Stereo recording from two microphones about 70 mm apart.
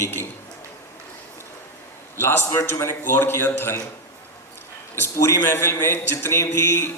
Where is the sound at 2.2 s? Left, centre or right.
Left.